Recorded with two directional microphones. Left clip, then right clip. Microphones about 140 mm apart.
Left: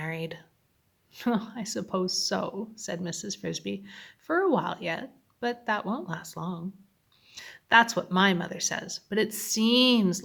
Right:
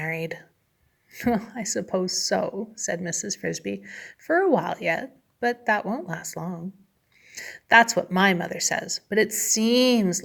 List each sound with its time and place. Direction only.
0.0 s a sound: 20° right (ahead or behind)
1.1 s speech: 15° right (ahead or behind)
5.8 s speech: 5° right (ahead or behind)
6.1 s speech: 20° right (ahead or behind)